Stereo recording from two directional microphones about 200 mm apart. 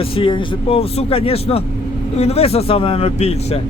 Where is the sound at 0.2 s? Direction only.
25° left (ahead or behind).